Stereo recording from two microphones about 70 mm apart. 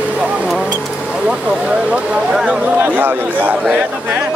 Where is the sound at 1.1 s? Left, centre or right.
Centre.